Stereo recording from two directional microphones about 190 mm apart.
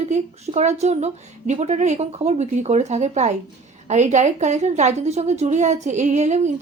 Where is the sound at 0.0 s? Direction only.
35° right (ahead or behind).